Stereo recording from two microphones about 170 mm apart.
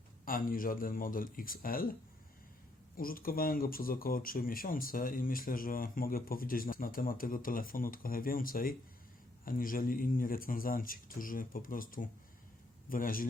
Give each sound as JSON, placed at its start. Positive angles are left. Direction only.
{"t": 0.3, "sound": "speech", "side_deg": 55}
{"t": 3.0, "sound": "speech", "side_deg": 60}